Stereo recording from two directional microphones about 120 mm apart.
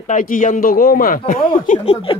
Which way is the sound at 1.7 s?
90° left.